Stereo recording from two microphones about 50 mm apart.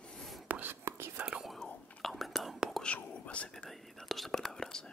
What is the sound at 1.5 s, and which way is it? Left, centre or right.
Whispering, centre.